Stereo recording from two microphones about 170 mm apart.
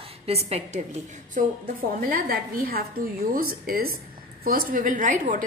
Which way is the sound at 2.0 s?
60° right (ahead or behind).